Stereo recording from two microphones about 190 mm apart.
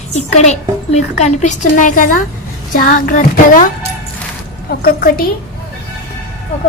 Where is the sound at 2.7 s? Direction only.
45° left (ahead or behind).